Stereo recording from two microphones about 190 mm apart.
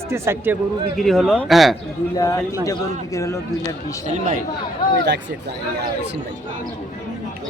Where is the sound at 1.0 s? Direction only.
Centre (ahead or behind).